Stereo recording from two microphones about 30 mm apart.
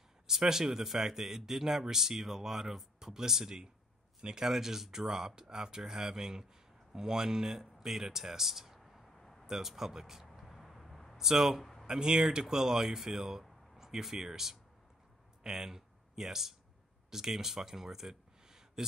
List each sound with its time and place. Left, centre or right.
0.3 s speech: centre
4.5 s speech: centre
8.7 s a sound: centre
9.5 s speech: centre
10.4 s vehicle: centre
11.1 s speech: centre
11.8 s speech: right